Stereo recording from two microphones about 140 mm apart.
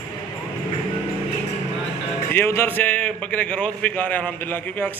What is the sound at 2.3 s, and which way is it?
A man's voice, 15° left (ahead or behind).